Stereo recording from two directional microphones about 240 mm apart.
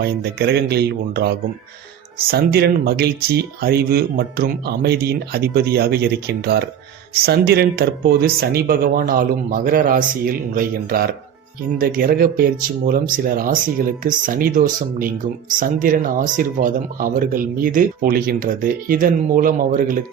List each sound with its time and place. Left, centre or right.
0.0 s speech: right